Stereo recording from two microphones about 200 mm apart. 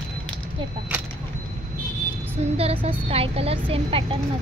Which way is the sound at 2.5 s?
30° right (ahead or behind).